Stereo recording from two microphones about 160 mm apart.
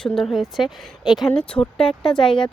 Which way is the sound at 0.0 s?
Centre (ahead or behind).